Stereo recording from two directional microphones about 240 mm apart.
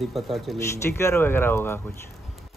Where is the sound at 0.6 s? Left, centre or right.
Centre.